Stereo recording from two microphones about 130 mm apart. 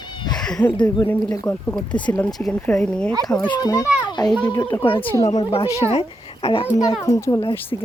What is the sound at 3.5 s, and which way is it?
A child's voice, 30° left (ahead or behind).